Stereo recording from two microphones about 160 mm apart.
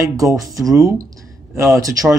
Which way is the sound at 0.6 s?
20° right (ahead or behind).